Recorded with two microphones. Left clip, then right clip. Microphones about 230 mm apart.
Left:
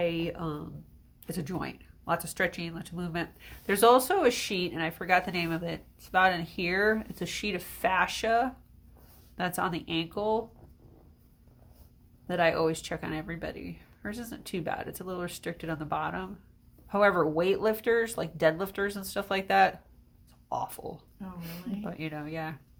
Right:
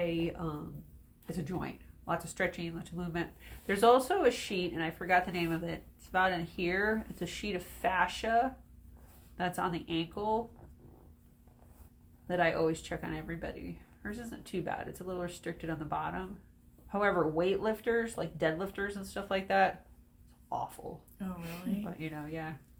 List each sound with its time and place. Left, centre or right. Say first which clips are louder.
0.0 s a sound: left 4 dB; left
1.3 s speech: left 3 dB; left
12.3 s speech: left 4 dB; left
21.8 s speech: left 4 dB; left